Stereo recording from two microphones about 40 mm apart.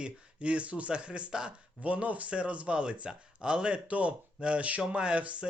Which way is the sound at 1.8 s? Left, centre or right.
Right.